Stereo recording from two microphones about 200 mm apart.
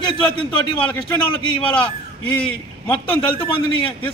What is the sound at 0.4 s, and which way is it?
Speech, 5° left (ahead or behind).